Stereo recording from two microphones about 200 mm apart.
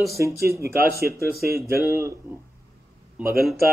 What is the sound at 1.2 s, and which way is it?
Speech, 50° right (ahead or behind).